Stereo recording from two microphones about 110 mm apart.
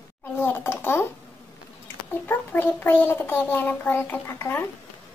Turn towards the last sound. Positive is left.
turn(degrees=20)  # may be behind; listen again after turning